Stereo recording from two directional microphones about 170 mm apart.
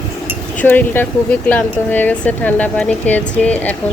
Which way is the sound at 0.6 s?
10° left (ahead or behind).